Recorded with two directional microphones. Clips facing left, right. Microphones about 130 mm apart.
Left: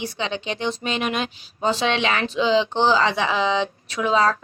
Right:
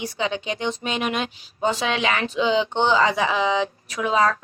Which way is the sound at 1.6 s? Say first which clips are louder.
Left 1 dB; 30° left (ahead or behind).